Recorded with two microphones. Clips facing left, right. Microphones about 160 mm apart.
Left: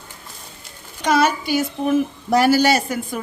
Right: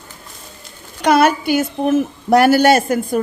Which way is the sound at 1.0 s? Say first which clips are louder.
Right 5 dB; 55° right (ahead or behind).